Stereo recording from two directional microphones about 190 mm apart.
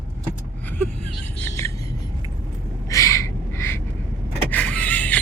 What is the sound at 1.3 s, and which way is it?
Music, 15° left (ahead or behind).